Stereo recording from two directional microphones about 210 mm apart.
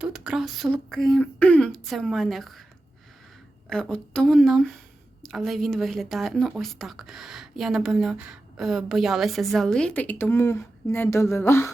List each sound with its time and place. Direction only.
0.0 s speech: 5° right (ahead or behind)
3.7 s speech: 5° left (ahead or behind)